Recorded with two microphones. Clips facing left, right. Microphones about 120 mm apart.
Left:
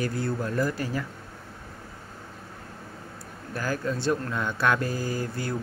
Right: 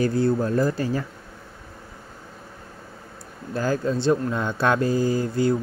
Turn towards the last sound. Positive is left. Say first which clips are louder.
# right 9 dB
turn(degrees=-25)  # may be behind; listen again after turning